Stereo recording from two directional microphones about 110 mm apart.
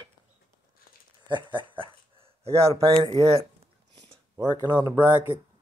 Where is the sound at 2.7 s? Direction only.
55° right (ahead or behind).